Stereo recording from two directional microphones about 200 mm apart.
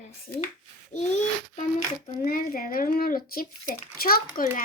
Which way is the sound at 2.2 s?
45° left (ahead or behind).